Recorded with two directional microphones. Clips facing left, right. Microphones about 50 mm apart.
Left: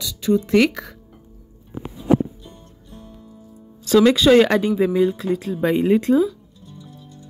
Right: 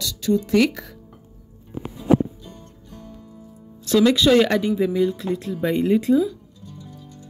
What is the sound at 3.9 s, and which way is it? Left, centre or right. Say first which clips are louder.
Speech: left 3 dB; left.